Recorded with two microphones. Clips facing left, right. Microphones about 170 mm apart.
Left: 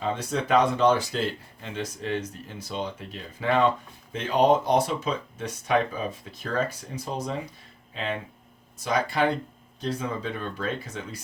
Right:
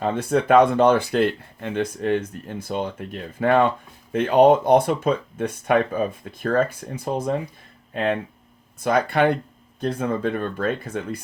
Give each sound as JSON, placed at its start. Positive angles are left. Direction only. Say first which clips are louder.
{"t": 0.0, "sound": "speech", "louder": "right 7 dB", "side_deg": -55}